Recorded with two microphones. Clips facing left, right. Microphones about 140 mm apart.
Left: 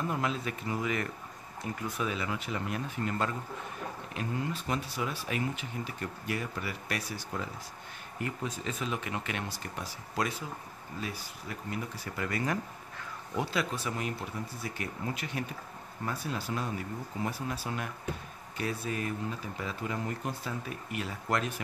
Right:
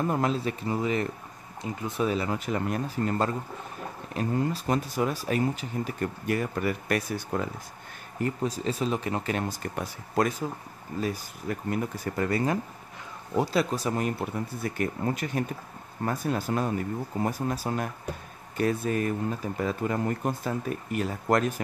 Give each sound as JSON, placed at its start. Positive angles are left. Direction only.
{"t": 0.0, "sound": "speech", "side_deg": -40}
{"t": 2.0, "sound": "speech", "side_deg": -40}
{"t": 8.2, "sound": "speech", "side_deg": -35}
{"t": 12.3, "sound": "speech", "side_deg": -30}